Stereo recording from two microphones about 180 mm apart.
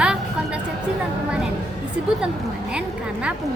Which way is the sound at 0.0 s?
5° right (ahead or behind).